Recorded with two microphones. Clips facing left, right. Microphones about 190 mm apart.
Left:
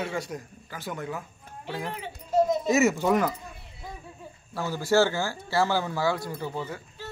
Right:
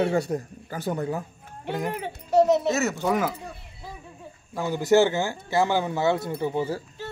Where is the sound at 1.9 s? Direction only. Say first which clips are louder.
Right 4 dB; 65° right (ahead or behind).